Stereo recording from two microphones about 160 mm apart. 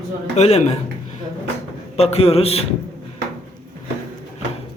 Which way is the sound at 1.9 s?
40° left (ahead or behind).